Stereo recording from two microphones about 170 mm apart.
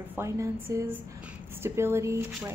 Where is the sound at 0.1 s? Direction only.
15° right (ahead or behind).